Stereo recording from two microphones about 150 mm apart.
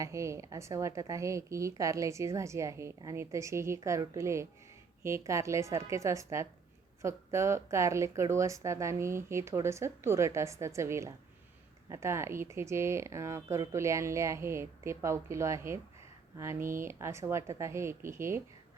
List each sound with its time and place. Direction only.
0.0 s a woman's voice: 20° right (ahead or behind)